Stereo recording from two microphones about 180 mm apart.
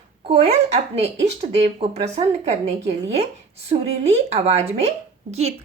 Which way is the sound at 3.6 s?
35° right (ahead or behind).